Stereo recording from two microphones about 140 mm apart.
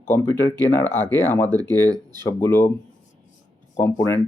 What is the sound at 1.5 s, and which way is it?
Speech, 25° right (ahead or behind).